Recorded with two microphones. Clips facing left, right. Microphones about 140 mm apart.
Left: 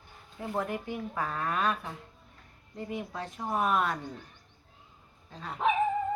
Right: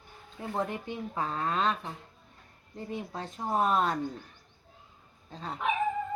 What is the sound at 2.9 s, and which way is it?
Speech, 25° right (ahead or behind).